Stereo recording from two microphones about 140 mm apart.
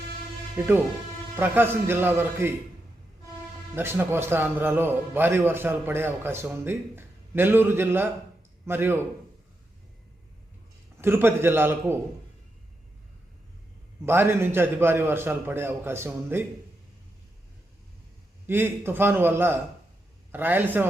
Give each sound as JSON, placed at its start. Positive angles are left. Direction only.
{"t": 0.6, "sound": "speech", "side_deg": -15}
{"t": 3.8, "sound": "speech", "side_deg": -15}
{"t": 11.0, "sound": "speech", "side_deg": -15}
{"t": 14.0, "sound": "speech", "side_deg": -15}
{"t": 18.4, "sound": "speech", "side_deg": -15}